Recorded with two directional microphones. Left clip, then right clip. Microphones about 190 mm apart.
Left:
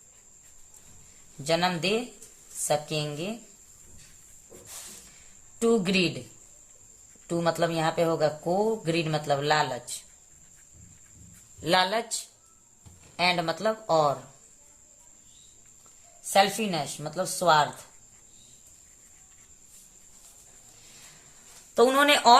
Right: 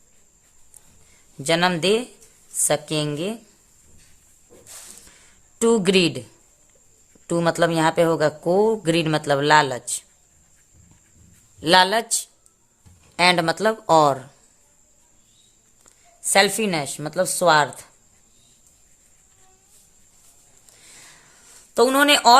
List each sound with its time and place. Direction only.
1.5 s speech: 50° right (ahead or behind)
5.5 s speech: 50° right (ahead or behind)
7.3 s speech: 50° right (ahead or behind)
11.6 s speech: 45° right (ahead or behind)
13.1 s speech: 55° right (ahead or behind)
16.3 s a woman's voice: 55° right (ahead or behind)
21.8 s speech: 30° right (ahead or behind)